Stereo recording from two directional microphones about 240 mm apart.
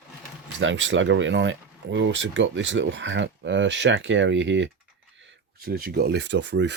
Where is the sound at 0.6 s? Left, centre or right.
Right.